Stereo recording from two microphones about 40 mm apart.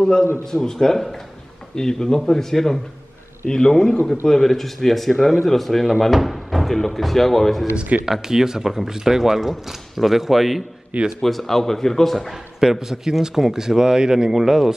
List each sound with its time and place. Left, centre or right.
0.0 s a man's voice: centre
3.4 s a man's voice: centre
7.7 s speech: right
8.0 s speech: centre
10.9 s speech: right
11.2 s a man's voice: centre
12.5 s speech: centre
14.3 s speech: centre